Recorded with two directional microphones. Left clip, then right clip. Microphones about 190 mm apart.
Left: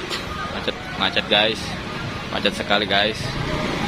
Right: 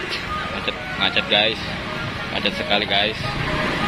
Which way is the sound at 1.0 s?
15° left (ahead or behind).